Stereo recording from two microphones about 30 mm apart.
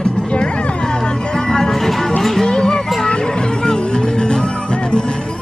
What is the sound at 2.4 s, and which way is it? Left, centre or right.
Music, left.